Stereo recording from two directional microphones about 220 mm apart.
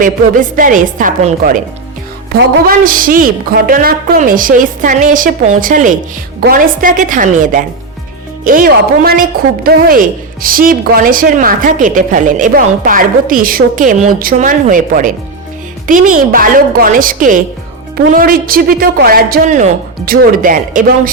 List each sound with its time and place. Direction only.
0.0 s a woman's voice: 40° right (ahead or behind)
16.3 s a woman's voice: 40° right (ahead or behind)